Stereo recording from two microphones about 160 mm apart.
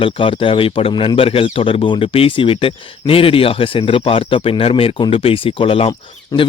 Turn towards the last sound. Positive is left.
turn(degrees=20)  # may be behind; listen again after turning